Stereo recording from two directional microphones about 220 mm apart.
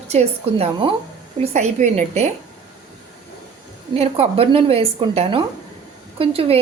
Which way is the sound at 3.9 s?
25° right (ahead or behind).